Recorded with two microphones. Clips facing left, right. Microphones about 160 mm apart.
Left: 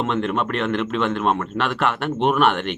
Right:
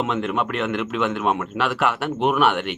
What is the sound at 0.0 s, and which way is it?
Speech, 10° right (ahead or behind).